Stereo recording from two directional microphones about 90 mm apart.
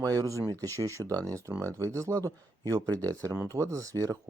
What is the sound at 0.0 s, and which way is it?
Speech, 40° right (ahead or behind).